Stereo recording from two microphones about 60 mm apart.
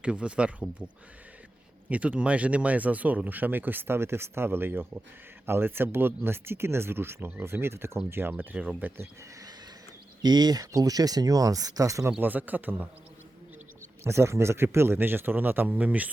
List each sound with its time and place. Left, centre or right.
0.0 s speech: centre
1.9 s speech: right
8.4 s speech: right
10.4 s speech: right
12.2 s speech: right
14.0 s speech: right